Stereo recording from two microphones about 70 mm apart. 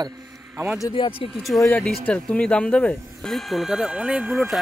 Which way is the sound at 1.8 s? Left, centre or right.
Centre.